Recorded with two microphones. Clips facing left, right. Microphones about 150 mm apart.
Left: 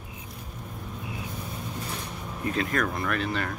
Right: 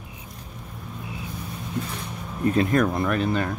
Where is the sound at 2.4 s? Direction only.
35° right (ahead or behind).